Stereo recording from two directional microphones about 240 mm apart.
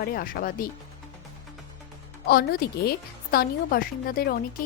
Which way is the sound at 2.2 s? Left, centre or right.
Left.